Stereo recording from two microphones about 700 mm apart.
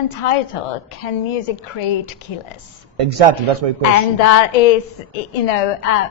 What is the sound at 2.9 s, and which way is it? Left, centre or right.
Speech, right.